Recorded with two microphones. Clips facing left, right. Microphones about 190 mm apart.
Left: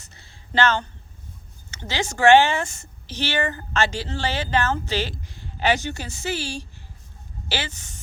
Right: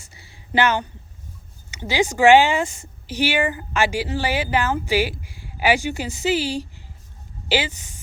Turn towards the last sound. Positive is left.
turn(degrees=-15)  # may be behind; listen again after turning